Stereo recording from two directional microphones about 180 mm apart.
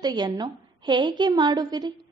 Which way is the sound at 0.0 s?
20° right (ahead or behind).